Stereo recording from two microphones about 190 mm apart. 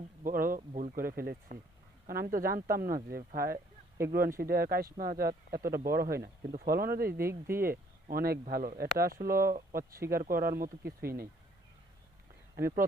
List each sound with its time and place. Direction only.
0.3 s speech: 50° right (ahead or behind)
7.3 s speech: 10° right (ahead or behind)
7.6 s speech: 50° right (ahead or behind)
12.5 s speech: 50° right (ahead or behind)